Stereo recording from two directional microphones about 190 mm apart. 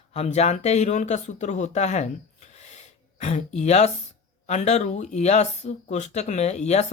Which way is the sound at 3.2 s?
35° left (ahead or behind).